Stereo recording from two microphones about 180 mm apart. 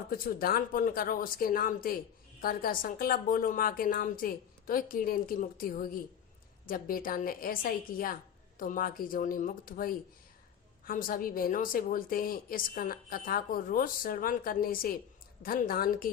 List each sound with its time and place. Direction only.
0.1 s a woman's voice: 55° left (ahead or behind)